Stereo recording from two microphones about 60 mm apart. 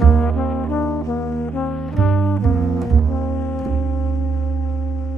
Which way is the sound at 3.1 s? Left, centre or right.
Left.